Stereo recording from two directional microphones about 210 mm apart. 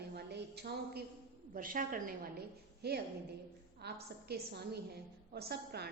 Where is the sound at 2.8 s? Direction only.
50° right (ahead or behind).